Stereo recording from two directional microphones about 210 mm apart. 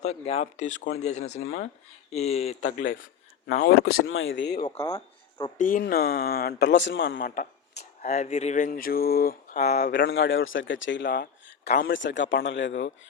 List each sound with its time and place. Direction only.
0.0 s speech: 30° left (ahead or behind)
4.0 s speech: 70° left (ahead or behind)
4.8 s a sound: 15° left (ahead or behind)
5.5 s a man's voice: 40° left (ahead or behind); by 7.3 s 65° left (ahead or behind)
8.0 s speech: 40° left (ahead or behind)
10.1 s speech: 65° left (ahead or behind)